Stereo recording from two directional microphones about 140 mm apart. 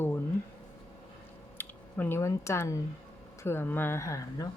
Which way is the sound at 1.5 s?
15° left (ahead or behind).